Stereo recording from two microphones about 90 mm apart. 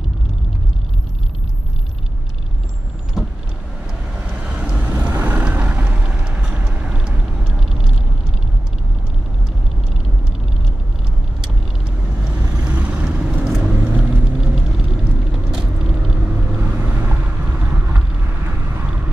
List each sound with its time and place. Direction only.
3.2 s vehicle: centre (ahead or behind)
4.5 s boat: 10° right (ahead or behind)
5.0 s vehicle: 15° right (ahead or behind)
12.5 s vehicle: 15° right (ahead or behind)